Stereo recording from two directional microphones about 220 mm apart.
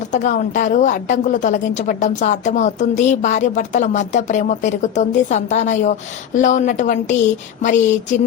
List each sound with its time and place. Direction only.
0.1 s a woman's voice: 35° left (ahead or behind)